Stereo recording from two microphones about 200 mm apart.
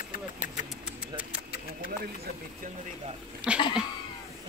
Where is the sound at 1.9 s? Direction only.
50° right (ahead or behind).